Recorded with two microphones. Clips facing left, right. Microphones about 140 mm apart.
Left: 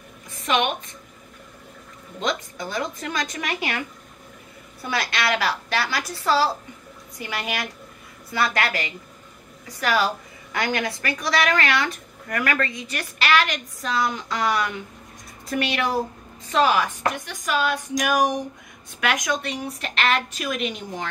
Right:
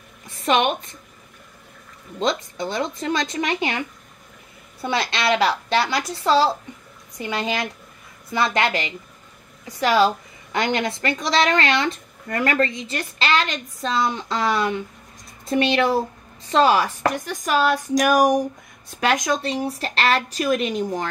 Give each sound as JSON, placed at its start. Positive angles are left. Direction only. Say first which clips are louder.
{"t": 0.5, "sound": "speech", "louder": "right 3 dB", "side_deg": -35}
{"t": 2.1, "sound": "a woman's voice", "louder": "right 4 dB", "side_deg": -30}
{"t": 4.8, "sound": "a woman's voice", "louder": "right 3 dB", "side_deg": -25}
{"t": 18.9, "sound": "speech", "louder": "right 3 dB", "side_deg": -30}